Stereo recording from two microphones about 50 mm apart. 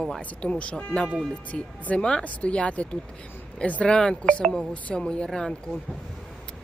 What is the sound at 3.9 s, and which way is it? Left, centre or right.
Speech, centre.